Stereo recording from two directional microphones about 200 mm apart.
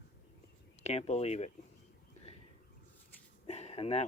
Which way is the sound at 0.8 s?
35° left (ahead or behind).